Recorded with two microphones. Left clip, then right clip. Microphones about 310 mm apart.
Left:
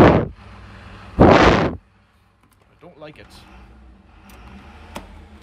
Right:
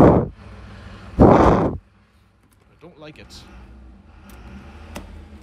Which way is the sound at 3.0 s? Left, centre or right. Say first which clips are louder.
Left 2 dB; centre.